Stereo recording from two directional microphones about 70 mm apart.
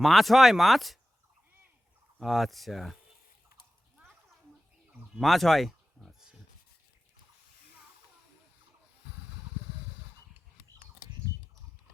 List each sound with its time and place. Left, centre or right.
0.0 s speech: centre
2.2 s speech: centre
5.2 s a sound: centre